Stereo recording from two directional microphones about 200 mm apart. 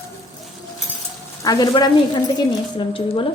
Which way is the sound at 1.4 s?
20° left (ahead or behind).